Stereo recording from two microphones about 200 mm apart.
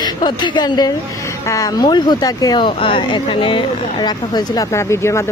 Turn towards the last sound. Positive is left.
turn(degrees=15)  # may be behind; listen again after turning